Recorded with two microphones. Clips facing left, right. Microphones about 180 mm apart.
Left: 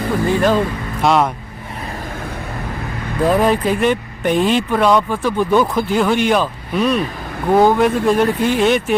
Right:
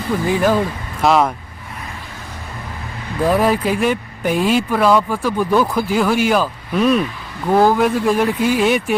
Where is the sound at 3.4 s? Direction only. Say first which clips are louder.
Left 1 dB; 5° right (ahead or behind).